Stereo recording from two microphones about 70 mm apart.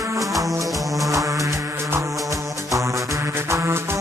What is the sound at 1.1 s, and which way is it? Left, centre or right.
Music, right.